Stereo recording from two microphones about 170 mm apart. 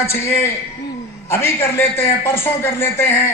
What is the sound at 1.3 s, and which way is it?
A man's voice, 15° left (ahead or behind).